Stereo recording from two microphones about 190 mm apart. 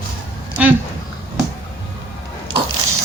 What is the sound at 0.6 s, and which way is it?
Speech, 5° right (ahead or behind).